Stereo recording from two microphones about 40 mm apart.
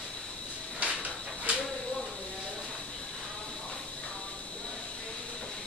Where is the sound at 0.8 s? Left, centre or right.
Right.